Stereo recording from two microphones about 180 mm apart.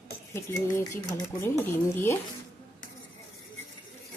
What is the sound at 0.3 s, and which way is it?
Speech, 15° left (ahead or behind).